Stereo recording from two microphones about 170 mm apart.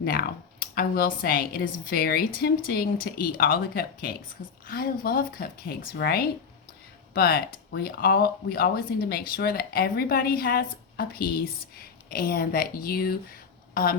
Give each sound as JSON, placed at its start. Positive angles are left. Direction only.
{"t": 0.0, "sound": "speech", "side_deg": 60}